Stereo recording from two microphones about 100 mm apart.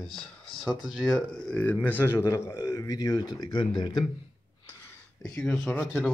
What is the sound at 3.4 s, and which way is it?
Speech, 50° left (ahead or behind).